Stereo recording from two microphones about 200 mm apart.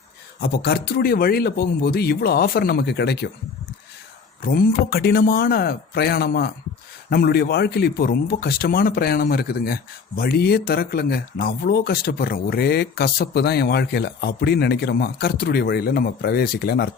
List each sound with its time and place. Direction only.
0.3 s speech: 50° left (ahead or behind)
4.4 s speech: 50° left (ahead or behind)